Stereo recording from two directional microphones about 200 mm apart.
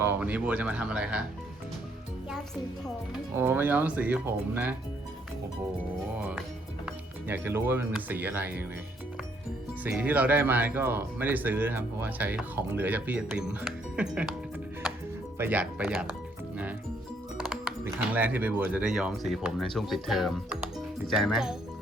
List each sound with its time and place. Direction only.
0.0 s speech: 10° right (ahead or behind)
3.1 s speech: 10° right (ahead or behind)
6.1 s speech: 5° right (ahead or behind)
9.8 s speech: 10° right (ahead or behind)
15.4 s speech: 10° right (ahead or behind)
17.8 s speech: 10° right (ahead or behind)